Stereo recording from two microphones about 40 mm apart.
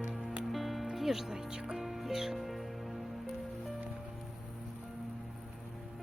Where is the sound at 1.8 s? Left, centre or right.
Centre.